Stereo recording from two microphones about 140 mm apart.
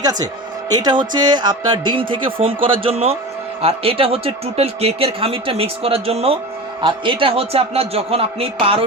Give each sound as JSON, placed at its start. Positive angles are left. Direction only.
{"t": 0.0, "sound": "a man's voice", "side_deg": -25}